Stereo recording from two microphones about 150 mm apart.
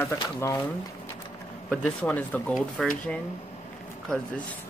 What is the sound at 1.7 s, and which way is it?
Speech, 10° left (ahead or behind).